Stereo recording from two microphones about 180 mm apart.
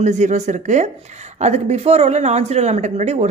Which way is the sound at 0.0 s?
40° right (ahead or behind).